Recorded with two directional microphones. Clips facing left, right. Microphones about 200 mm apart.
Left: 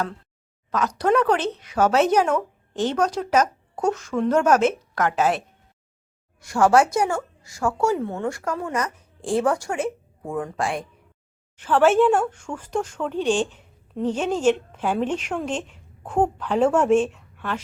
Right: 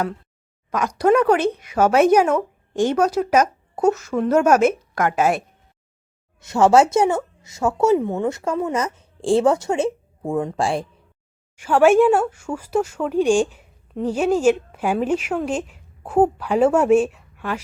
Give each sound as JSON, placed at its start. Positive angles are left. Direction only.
{"t": 0.7, "sound": "speech", "side_deg": -10}
{"t": 6.4, "sound": "speech", "side_deg": -25}
{"t": 11.5, "sound": "speech", "side_deg": -10}